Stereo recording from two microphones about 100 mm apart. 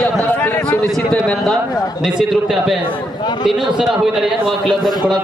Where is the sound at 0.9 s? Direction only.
5° left (ahead or behind).